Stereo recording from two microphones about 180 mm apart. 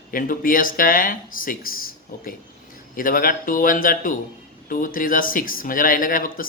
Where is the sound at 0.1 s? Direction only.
50° left (ahead or behind).